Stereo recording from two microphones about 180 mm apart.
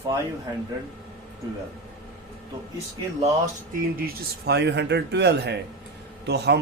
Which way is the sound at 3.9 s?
60° right (ahead or behind).